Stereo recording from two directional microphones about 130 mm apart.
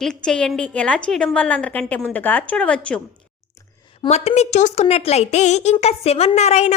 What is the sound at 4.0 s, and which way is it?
A woman's voice, 55° left (ahead or behind).